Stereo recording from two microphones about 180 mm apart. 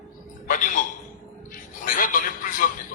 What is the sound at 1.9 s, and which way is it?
Speech, 50° left (ahead or behind).